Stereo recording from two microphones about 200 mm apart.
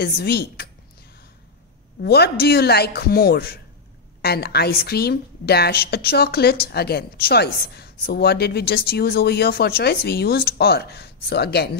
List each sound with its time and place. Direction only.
0.0 s a woman's voice: 50° left (ahead or behind)
2.0 s a woman's voice: 55° left (ahead or behind)